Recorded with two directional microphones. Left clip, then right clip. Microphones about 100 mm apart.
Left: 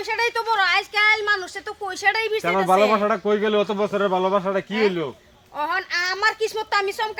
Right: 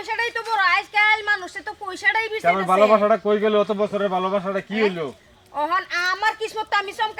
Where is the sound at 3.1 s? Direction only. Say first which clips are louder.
Right 2 dB; 40° left (ahead or behind).